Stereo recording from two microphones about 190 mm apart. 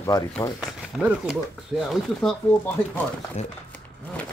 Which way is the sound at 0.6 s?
5° right (ahead or behind).